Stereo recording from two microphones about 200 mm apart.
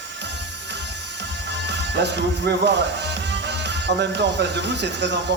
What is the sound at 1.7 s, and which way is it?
Speech, 55° right (ahead or behind).